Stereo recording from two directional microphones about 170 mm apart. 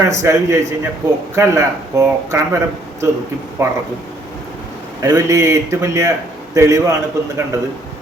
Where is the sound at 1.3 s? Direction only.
20° right (ahead or behind).